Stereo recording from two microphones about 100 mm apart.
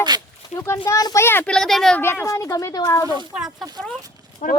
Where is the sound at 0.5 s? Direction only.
25° left (ahead or behind).